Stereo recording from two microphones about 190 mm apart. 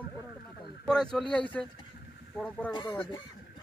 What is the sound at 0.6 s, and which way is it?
Speech, 5° left (ahead or behind).